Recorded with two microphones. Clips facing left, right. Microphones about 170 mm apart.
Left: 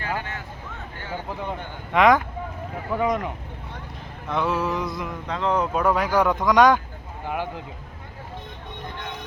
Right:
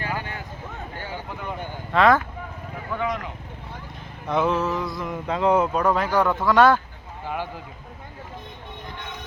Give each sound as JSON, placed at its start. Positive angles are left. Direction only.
{"t": 1.9, "sound": "speech", "side_deg": 15}
{"t": 2.9, "sound": "speech", "side_deg": 35}
{"t": 4.3, "sound": "speech", "side_deg": 0}
{"t": 5.0, "sound": "speech", "side_deg": -10}
{"t": 5.7, "sound": "speech", "side_deg": 10}